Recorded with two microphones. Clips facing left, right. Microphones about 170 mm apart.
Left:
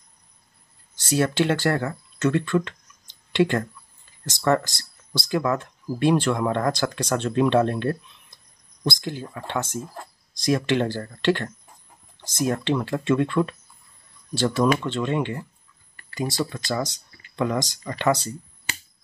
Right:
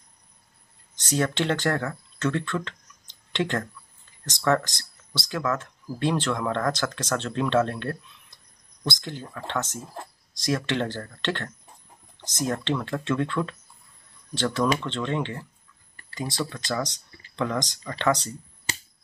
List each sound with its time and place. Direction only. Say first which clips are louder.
0.9 s speech: left 4 dB; 5° left (ahead or behind)